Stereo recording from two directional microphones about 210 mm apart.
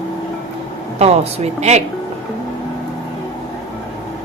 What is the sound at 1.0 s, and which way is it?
Speech, 30° right (ahead or behind).